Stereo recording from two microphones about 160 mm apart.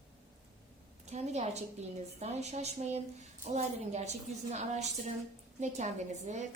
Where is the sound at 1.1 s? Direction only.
45° right (ahead or behind).